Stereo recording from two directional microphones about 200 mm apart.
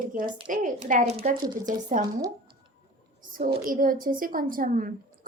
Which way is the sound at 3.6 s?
45° right (ahead or behind).